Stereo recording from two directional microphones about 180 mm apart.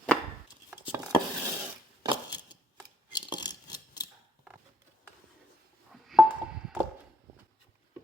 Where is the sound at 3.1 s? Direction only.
25° left (ahead or behind).